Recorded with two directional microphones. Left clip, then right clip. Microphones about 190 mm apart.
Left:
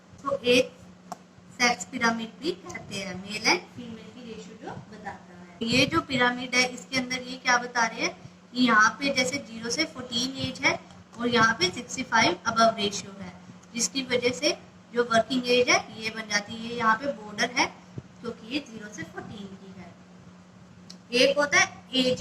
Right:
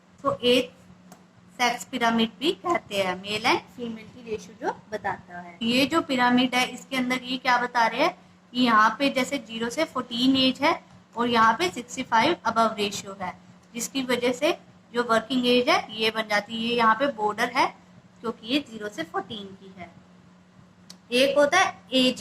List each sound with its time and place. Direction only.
0.3 s speech: 25° right (ahead or behind)
1.5 s child singing: 30° right (ahead or behind)
5.6 s child singing: 20° right (ahead or behind)
21.2 s child singing: 30° right (ahead or behind)